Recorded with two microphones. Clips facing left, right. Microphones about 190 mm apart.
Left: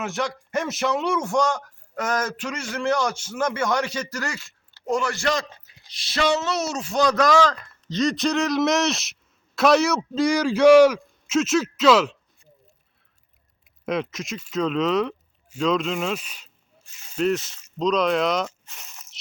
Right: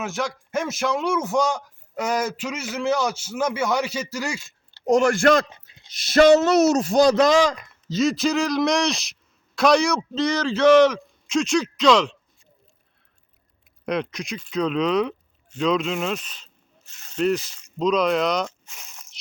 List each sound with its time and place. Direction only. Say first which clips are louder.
0.0 s a man's voice: even; centre (ahead or behind)
4.7 s speech: right 7 dB; 40° right (ahead or behind)
5.5 s a sound: even; 20° right (ahead or behind)
6.0 s a man's voice: right 9 dB; 45° right (ahead or behind); by 12.1 s 5° left (ahead or behind)
13.8 s speech: even; centre (ahead or behind)